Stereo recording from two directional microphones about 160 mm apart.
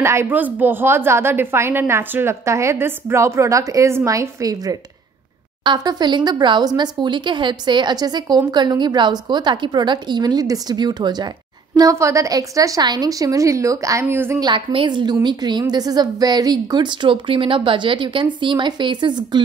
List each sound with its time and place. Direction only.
0.0 s a woman's voice: 15° right (ahead or behind)
14.4 s speech: 30° right (ahead or behind)